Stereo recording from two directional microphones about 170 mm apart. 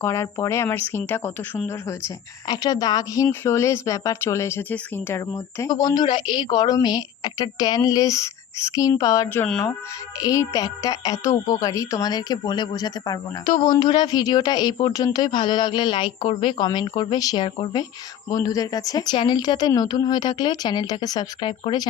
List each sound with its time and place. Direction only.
0.0 s speech: 15° left (ahead or behind)